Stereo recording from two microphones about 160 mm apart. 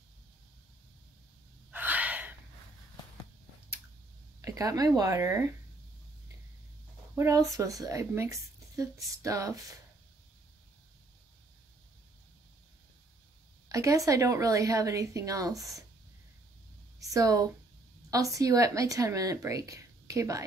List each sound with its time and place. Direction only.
1.7 s gasp: 10° right (ahead or behind)
4.4 s a woman's voice: 20° right (ahead or behind)
7.2 s a woman's voice: 20° right (ahead or behind)
13.7 s a woman's voice: 20° right (ahead or behind)
17.0 s a woman's voice: 20° right (ahead or behind)